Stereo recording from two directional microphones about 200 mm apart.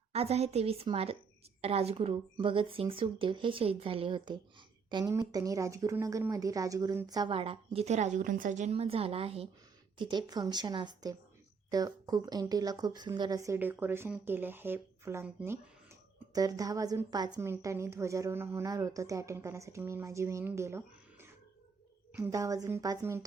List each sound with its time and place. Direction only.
0.1 s a woman's voice: 30° right (ahead or behind); by 21.2 s 15° right (ahead or behind)
22.3 s speech: 15° right (ahead or behind)